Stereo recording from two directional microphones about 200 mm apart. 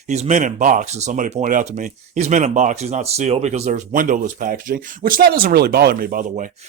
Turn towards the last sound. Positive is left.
turn(degrees=-40)  # may be behind; listen again after turning